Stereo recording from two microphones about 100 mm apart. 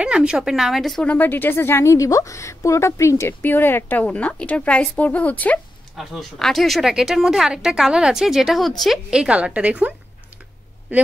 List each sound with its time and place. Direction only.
0.0 s speech: 10° right (ahead or behind)
1.0 s a woman's voice: 20° left (ahead or behind)
5.9 s a woman's voice: centre (ahead or behind); by 11.1 s 15° right (ahead or behind)